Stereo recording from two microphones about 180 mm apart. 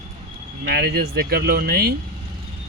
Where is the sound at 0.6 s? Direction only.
60° right (ahead or behind).